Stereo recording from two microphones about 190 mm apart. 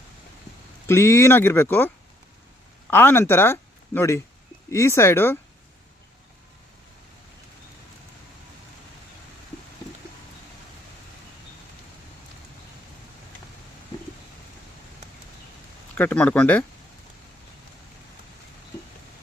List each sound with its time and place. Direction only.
0.9 s speech: 15° left (ahead or behind)
2.9 s speech: 10° left (ahead or behind)
16.0 s speech: 5° left (ahead or behind)